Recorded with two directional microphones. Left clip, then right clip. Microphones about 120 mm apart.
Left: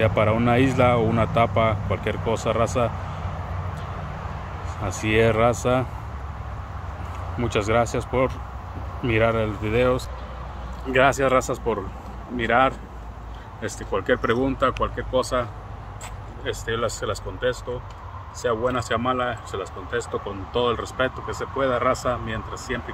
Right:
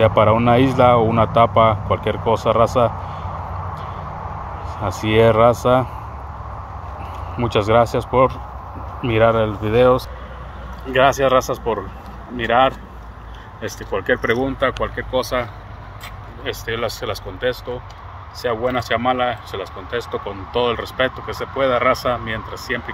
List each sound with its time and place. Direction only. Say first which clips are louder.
0.0 s speech: right 7 dB; centre (ahead or behind)
4.6 s speech: right 4 dB; centre (ahead or behind)
7.3 s speech: right 6 dB; centre (ahead or behind)
10.9 s speech: right 4 dB; 15° left (ahead or behind)
16.4 s speech: right 3 dB; 10° left (ahead or behind)